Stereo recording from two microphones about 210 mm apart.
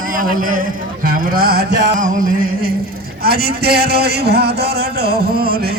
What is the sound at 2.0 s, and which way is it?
Music, 40° right (ahead or behind).